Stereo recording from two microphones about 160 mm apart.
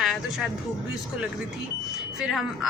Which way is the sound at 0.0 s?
Centre (ahead or behind).